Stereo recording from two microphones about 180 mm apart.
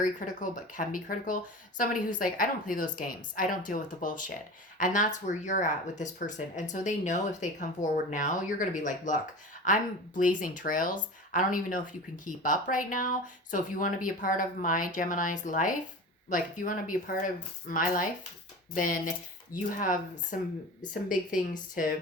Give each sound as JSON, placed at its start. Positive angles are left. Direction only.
{"t": 0.0, "sound": "speech", "side_deg": 45}